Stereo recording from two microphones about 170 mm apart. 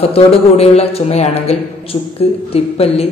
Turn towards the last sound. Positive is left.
turn(degrees=35)  # may be behind; listen again after turning